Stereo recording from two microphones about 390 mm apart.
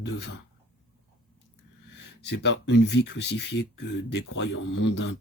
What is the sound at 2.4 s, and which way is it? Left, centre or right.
Speech, left.